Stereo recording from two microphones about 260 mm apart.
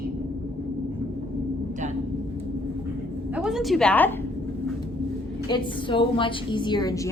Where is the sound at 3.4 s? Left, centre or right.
Centre.